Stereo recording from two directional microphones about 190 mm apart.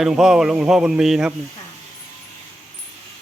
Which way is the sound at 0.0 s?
5° right (ahead or behind).